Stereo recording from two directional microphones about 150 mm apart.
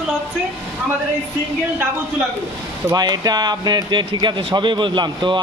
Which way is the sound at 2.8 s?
25° right (ahead or behind).